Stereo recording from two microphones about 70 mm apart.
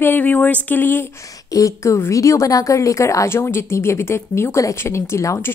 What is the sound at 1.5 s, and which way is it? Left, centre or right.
A woman's voice, left.